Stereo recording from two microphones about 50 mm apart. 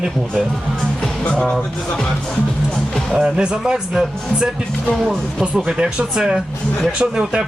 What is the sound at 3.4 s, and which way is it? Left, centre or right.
Speech, centre.